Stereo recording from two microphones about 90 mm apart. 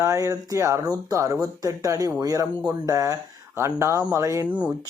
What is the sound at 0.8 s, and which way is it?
Speech, 45° right (ahead or behind).